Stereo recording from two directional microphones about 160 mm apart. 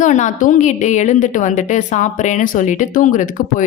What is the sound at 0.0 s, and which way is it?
A woman's voice, 50° left (ahead or behind).